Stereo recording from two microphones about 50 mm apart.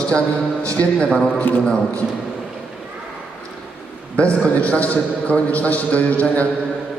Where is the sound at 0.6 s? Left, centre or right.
Left.